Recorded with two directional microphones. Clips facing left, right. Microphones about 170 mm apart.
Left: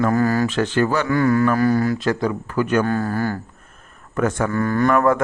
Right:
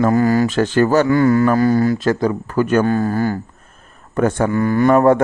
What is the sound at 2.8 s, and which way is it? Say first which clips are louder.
Speech: right 4 dB; 20° right (ahead or behind).